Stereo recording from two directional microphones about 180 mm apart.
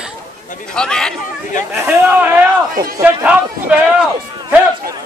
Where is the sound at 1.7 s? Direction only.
15° right (ahead or behind).